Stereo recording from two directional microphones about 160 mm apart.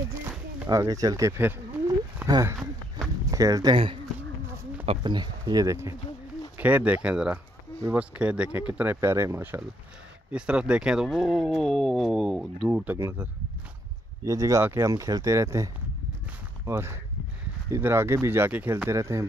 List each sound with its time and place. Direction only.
0.1 s a sound: 10° right (ahead or behind)
0.7 s speech: 20° right (ahead or behind)
3.7 s speech: 35° right (ahead or behind); by 19.2 s 20° right (ahead or behind)